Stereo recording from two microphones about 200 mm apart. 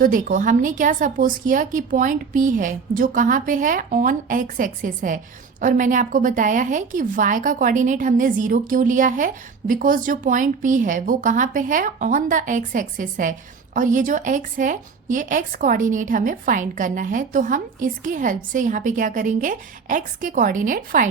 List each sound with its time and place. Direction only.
0.0 s a woman's voice: 45° right (ahead or behind)